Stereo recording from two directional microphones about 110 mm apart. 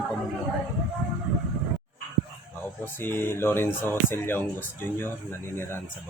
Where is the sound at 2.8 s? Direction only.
20° left (ahead or behind).